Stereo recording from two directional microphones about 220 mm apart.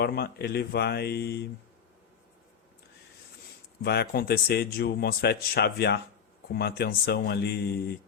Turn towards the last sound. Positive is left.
turn(degrees=45)  # may be behind; listen again after turning